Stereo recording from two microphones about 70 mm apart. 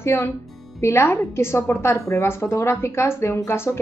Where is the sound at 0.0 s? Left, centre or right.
Left.